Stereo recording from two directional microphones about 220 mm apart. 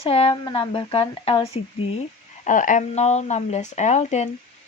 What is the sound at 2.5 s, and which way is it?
Speech, 35° left (ahead or behind).